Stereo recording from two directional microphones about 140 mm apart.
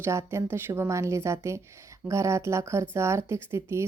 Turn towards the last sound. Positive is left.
turn(degrees=-20)  # may be behind; listen again after turning